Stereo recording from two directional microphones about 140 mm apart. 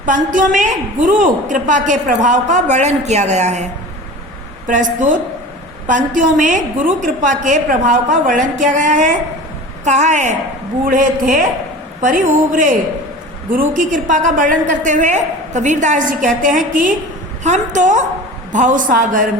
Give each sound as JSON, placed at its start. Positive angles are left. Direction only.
{"t": 0.0, "sound": "a woman's voice", "side_deg": -70}
{"t": 4.6, "sound": "a woman's voice", "side_deg": -70}
{"t": 10.8, "sound": "a woman's voice", "side_deg": -75}
{"t": 17.4, "sound": "a woman's voice", "side_deg": -60}